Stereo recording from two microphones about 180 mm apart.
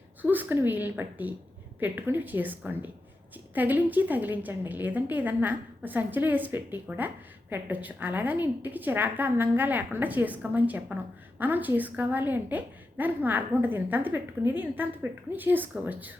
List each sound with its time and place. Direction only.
0.2 s a woman's voice: 10° right (ahead or behind)